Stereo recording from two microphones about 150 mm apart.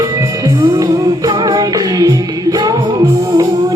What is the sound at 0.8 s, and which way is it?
Music, 25° right (ahead or behind).